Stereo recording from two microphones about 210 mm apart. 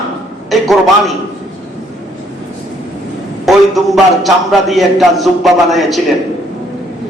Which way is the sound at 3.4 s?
Centre (ahead or behind).